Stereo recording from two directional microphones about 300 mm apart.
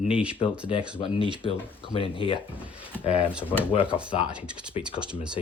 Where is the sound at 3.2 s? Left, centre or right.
Centre.